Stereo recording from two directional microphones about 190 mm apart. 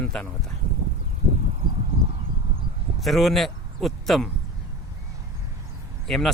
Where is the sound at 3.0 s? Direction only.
Centre (ahead or behind).